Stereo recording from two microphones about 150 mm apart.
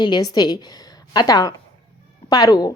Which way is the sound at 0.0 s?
30° left (ahead or behind).